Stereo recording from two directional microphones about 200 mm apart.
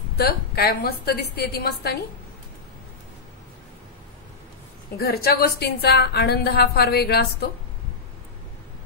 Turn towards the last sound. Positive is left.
turn(degrees=55)  # may be behind; listen again after turning